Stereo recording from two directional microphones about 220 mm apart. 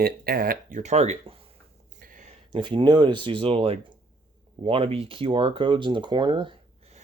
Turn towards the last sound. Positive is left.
turn(degrees=-20)  # may be behind; listen again after turning